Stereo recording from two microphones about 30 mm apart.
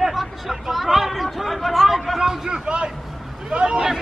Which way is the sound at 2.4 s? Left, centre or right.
Right.